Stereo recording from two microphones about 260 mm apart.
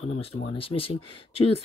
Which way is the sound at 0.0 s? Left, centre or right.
Left.